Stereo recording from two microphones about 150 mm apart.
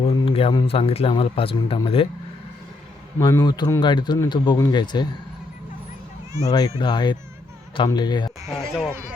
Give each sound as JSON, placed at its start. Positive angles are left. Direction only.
{"t": 0.3, "sound": "a sound", "side_deg": 40}
{"t": 0.5, "sound": "speech", "side_deg": 40}
{"t": 3.2, "sound": "speech", "side_deg": 25}
{"t": 6.5, "sound": "speech", "side_deg": 25}
{"t": 8.4, "sound": "speech", "side_deg": 0}